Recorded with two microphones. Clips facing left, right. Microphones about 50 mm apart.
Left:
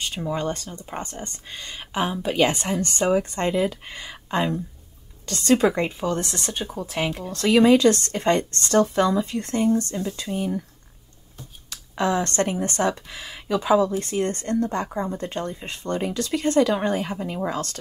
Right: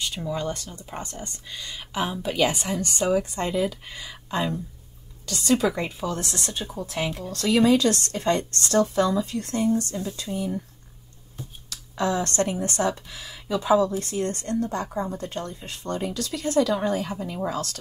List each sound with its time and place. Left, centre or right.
0.0 s speech: left
2.0 s speech: left
2.8 s speech: left
5.2 s speech: left
5.7 s speech: left
6.1 s speech: left
6.7 s speech: left
9.0 s speech: left
9.3 s speech: left
11.9 s speech: left
14.9 s speech: left
15.1 s speech: left